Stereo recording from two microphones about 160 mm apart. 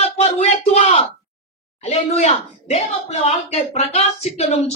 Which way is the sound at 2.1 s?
40° left (ahead or behind).